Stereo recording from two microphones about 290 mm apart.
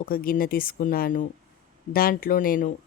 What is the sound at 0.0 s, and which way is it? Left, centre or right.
Speech, left.